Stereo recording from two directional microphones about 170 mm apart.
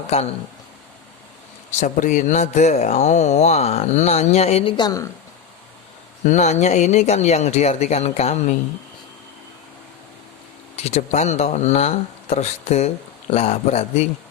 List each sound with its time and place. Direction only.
1.8 s speech: 50° left (ahead or behind)
6.2 s speech: 45° left (ahead or behind)
10.8 s speech: 40° left (ahead or behind)